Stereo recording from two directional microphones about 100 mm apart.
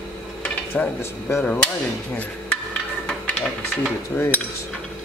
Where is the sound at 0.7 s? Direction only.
25° left (ahead or behind).